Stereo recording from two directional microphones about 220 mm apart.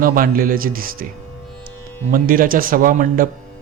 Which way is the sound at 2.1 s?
40° right (ahead or behind).